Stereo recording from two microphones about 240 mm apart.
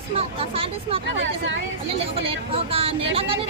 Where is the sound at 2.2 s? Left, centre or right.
Right.